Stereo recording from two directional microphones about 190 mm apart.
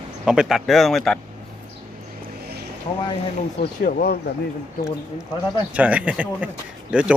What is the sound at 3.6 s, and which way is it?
Speech, 50° left (ahead or behind).